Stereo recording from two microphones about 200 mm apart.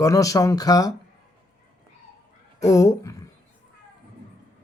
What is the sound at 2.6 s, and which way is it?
Speech, 15° left (ahead or behind).